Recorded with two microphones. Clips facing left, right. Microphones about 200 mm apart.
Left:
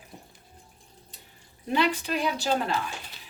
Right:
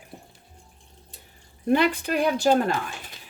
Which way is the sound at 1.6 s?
50° right (ahead or behind).